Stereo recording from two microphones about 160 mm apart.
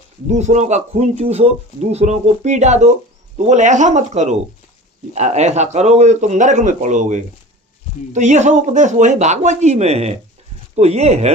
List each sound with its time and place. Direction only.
0.3 s speech: 45° right (ahead or behind)